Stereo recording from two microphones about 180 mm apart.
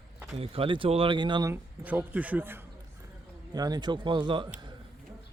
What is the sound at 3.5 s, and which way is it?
Speech, 20° right (ahead or behind).